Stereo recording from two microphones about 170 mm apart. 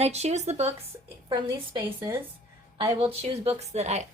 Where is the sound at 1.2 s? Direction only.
25° right (ahead or behind).